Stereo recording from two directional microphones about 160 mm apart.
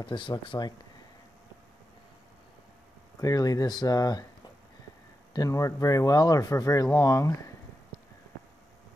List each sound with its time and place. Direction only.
0.0 s speech: 30° left (ahead or behind)
3.2 s speech: 25° left (ahead or behind)
5.3 s speech: 20° left (ahead or behind)